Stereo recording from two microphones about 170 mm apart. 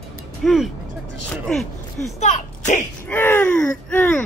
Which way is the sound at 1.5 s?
Centre (ahead or behind).